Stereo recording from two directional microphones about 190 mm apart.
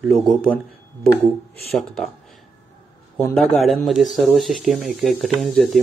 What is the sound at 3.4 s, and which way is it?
Speech, centre (ahead or behind).